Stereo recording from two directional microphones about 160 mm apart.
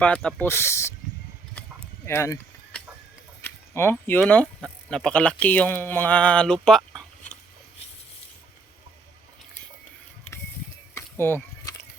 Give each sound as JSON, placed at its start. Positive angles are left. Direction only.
{"t": 0.0, "sound": "speech", "side_deg": 5}
{"t": 2.0, "sound": "speech", "side_deg": 20}
{"t": 3.4, "sound": "speech", "side_deg": 15}
{"t": 10.9, "sound": "a sound", "side_deg": 15}